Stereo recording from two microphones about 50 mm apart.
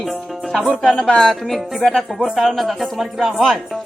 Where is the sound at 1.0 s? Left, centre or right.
Centre.